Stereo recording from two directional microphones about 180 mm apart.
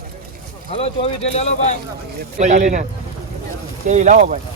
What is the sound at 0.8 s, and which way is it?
Speech, 35° left (ahead or behind).